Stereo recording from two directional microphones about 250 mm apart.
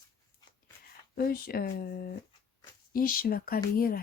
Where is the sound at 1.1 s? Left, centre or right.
Left.